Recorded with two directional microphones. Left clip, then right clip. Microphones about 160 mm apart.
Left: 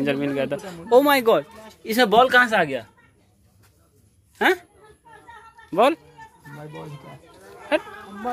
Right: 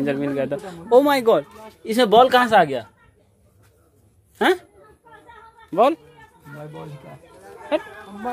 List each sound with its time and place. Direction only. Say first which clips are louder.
0.0 s speech: right 1 dB; 5° right (ahead or behind); by 2.9 s 35° right (ahead or behind)
4.4 s speech: right 1 dB; 20° right (ahead or behind)
5.7 s speech: right 1 dB; centre (ahead or behind)